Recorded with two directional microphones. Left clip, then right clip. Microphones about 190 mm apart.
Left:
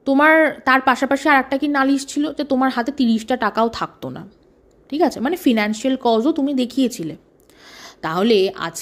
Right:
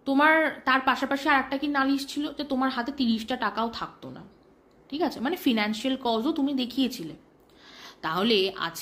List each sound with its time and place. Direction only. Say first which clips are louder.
0.0 s a woman's voice: left 8 dB; 40° left (ahead or behind)